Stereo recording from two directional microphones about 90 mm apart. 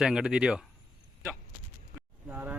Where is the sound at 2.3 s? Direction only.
15° right (ahead or behind).